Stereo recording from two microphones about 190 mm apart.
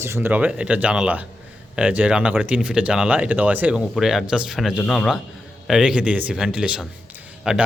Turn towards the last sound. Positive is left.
turn(degrees=-5)  # may be behind; listen again after turning